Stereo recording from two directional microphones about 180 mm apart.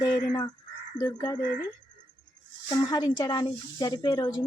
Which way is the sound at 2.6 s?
20° left (ahead or behind).